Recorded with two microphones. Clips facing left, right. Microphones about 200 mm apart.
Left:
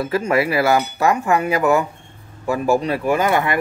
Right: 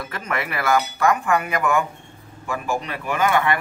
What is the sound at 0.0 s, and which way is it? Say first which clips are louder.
Speech: left 10 dB; 30° left (ahead or behind).